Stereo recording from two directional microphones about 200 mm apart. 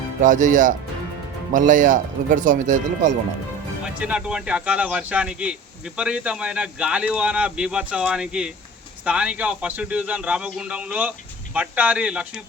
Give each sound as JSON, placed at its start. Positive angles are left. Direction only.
{"t": 0.2, "sound": "speech", "side_deg": -40}
{"t": 3.8, "sound": "speech", "side_deg": -5}